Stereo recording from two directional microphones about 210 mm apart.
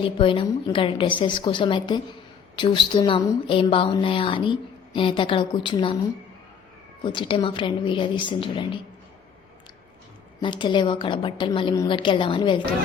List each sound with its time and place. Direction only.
0.2 s a woman's voice: 25° left (ahead or behind)
7.0 s a woman's voice: 25° left (ahead or behind)
10.4 s a woman's voice: 20° left (ahead or behind)